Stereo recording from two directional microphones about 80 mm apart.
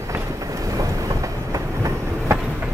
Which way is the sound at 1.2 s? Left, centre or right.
Right.